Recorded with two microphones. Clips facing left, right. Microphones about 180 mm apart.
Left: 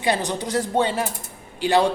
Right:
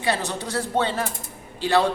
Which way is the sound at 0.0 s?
15° left (ahead or behind).